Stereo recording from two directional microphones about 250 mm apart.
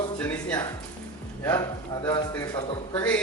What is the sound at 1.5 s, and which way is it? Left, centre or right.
Speech, centre.